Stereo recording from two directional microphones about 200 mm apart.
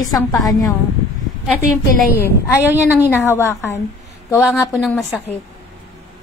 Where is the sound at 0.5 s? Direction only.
20° left (ahead or behind).